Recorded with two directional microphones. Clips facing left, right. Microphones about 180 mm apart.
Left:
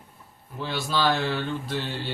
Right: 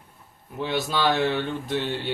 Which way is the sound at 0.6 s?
20° right (ahead or behind).